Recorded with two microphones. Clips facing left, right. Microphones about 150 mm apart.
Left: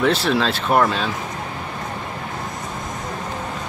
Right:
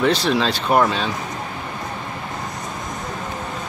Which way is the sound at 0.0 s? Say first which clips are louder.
Even; 5° left (ahead or behind).